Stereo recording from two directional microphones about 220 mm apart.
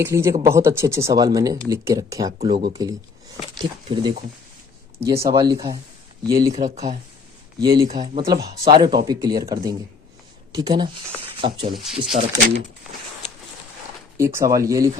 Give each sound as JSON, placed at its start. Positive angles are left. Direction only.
{"t": 0.0, "sound": "speech", "side_deg": -15}
{"t": 6.7, "sound": "speech", "side_deg": -30}
{"t": 7.6, "sound": "speech", "side_deg": -20}
{"t": 11.7, "sound": "speech", "side_deg": 0}
{"t": 14.2, "sound": "speech", "side_deg": -10}